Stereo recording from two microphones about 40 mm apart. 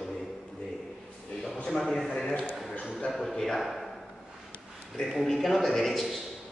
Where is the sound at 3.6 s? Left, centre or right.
Centre.